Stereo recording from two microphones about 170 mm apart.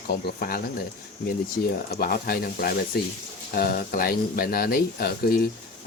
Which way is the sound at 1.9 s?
60° left (ahead or behind).